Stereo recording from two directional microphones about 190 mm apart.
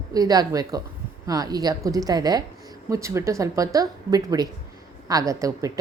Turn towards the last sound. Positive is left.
turn(degrees=-15)  # may be behind; listen again after turning